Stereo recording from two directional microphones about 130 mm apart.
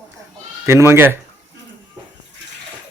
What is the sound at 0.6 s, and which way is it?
Speech, 20° right (ahead or behind).